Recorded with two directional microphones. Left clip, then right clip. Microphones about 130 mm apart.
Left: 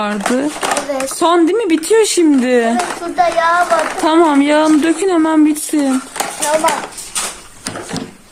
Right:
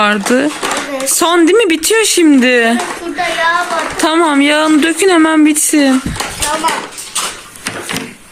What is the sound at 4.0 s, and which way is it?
Music, 5° left (ahead or behind).